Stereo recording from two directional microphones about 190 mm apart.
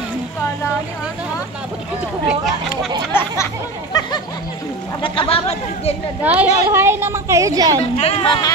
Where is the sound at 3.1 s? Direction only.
10° left (ahead or behind).